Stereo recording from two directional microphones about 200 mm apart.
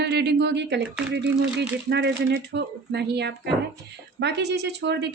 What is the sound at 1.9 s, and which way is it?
A woman's voice, 60° right (ahead or behind).